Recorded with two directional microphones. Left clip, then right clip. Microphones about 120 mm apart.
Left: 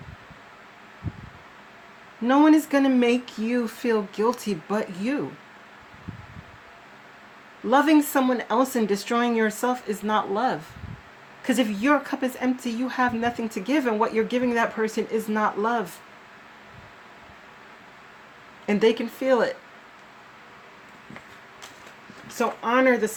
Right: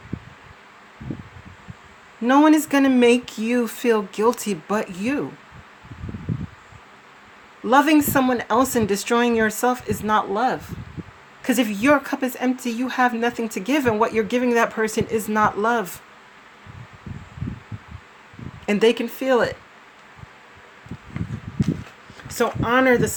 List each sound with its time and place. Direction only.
2.2 s speech: 70° right (ahead or behind)
7.7 s a woman's voice: 70° right (ahead or behind)
18.6 s speech: 90° right; by 19.5 s 65° right (ahead or behind)
22.4 s speech: 85° right